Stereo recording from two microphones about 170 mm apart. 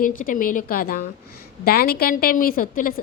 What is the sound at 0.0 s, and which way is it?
A woman's voice, 55° left (ahead or behind).